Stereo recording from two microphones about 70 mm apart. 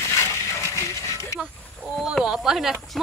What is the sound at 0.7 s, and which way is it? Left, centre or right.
Music, left.